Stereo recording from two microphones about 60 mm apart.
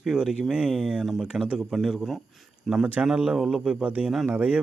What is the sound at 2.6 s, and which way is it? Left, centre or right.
Speech, centre.